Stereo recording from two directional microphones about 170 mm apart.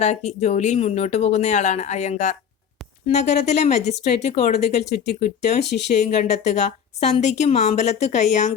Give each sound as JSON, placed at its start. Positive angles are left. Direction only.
{"t": 0.0, "sound": "a woman's voice", "side_deg": 40}